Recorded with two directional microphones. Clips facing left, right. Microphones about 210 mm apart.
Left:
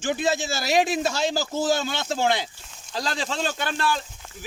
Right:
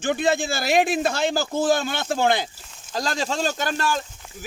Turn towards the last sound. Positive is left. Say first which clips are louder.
# right 2 dB
turn(degrees=-45)  # may be behind; listen again after turning